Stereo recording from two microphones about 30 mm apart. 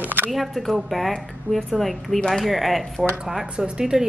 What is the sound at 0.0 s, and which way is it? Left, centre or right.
Camera, right.